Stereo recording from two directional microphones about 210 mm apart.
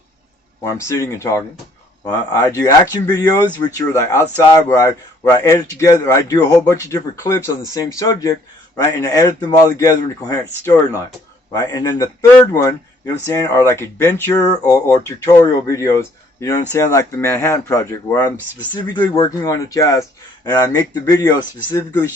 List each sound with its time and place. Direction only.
0.6 s a man's voice: 15° left (ahead or behind)